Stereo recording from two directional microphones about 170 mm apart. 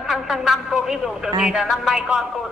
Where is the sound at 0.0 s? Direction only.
Centre (ahead or behind).